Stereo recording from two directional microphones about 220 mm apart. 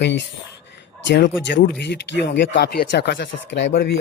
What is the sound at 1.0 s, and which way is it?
Speech, 50° left (ahead or behind).